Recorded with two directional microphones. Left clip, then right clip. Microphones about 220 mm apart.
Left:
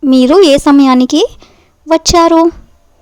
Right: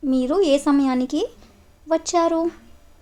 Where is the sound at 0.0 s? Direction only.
40° left (ahead or behind).